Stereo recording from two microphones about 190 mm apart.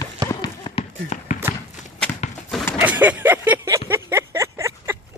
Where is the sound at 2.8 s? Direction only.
10° right (ahead or behind).